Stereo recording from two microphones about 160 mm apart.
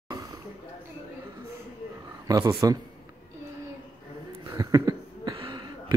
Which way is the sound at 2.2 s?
25° right (ahead or behind).